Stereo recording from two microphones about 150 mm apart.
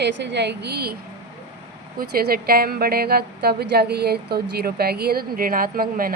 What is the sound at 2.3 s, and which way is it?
A woman's voice, 90° right.